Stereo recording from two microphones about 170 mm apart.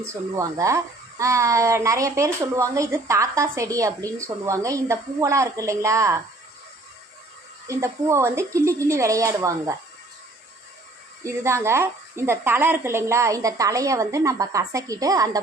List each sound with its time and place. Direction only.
0.0 s speech: 15° right (ahead or behind)
7.7 s speech: 15° right (ahead or behind)
11.2 s a woman's voice: 15° right (ahead or behind)